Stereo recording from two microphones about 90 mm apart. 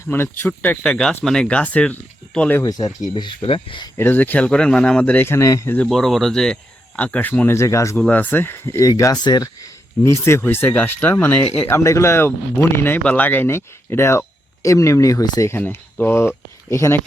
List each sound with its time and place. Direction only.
0.0 s speech: 25° left (ahead or behind)
0.8 s speech: 10° left (ahead or behind)
2.6 s speech: 45° left (ahead or behind)
3.2 s speech: 65° left (ahead or behind)
3.9 s speech: 25° left (ahead or behind)
5.1 s speech: 25° left (ahead or behind)
5.9 s speech: centre (ahead or behind); by 7.5 s 20° left (ahead or behind)
7.5 s speech: 35° left (ahead or behind)
7.9 s speech: 15° left (ahead or behind); by 9.2 s 40° left (ahead or behind)
9.2 s speech: 50° left (ahead or behind)
10.0 s speech: 30° left (ahead or behind)
15.5 s speech: 20° left (ahead or behind)
16.6 s speech: 35° left (ahead or behind)